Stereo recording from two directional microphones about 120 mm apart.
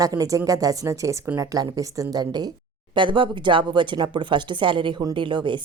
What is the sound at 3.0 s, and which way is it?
Speech, 45° right (ahead or behind).